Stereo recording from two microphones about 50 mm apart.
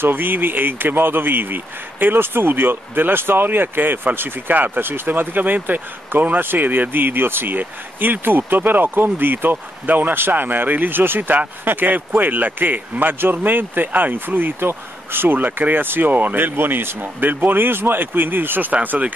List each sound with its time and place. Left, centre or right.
0.0 s speech: right
18.7 s speech: right